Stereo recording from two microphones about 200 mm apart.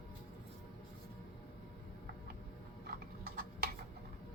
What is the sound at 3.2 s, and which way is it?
Tick-tock, 45° right (ahead or behind).